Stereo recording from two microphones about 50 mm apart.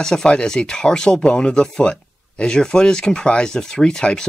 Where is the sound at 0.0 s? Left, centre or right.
Centre.